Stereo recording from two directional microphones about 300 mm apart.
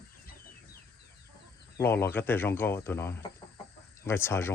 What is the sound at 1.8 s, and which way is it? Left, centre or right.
Speech, centre.